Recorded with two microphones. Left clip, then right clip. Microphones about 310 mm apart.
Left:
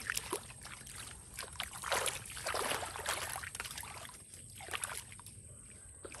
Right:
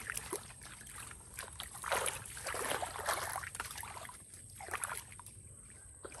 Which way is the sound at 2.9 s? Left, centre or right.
Centre.